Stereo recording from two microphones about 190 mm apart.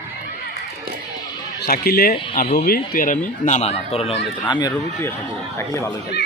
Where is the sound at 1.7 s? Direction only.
55° left (ahead or behind); by 4.3 s 30° left (ahead or behind).